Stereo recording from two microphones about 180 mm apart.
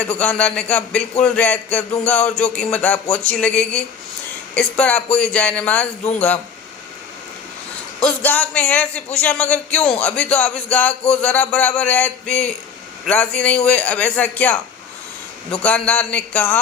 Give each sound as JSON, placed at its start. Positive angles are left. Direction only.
{"t": 0.2, "sound": "a man's voice", "side_deg": 5}
{"t": 8.0, "sound": "a man's voice", "side_deg": 10}
{"t": 15.6, "sound": "a man's voice", "side_deg": 10}